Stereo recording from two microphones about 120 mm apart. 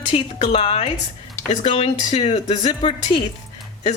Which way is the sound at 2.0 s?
65° left (ahead or behind).